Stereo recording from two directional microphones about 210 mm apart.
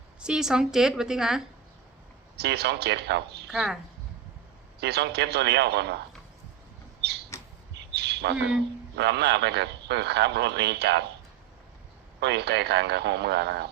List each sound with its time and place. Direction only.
0.2 s a woman's voice: 5° right (ahead or behind)
2.3 s speech: 50° right (ahead or behind)
3.5 s a woman's voice: centre (ahead or behind)
4.8 s speech: 50° right (ahead or behind)
7.3 s a sound: 15° left (ahead or behind)
7.8 s bird: 55° right (ahead or behind)
9.0 s speech: 55° right (ahead or behind)
12.2 s speech: 50° right (ahead or behind)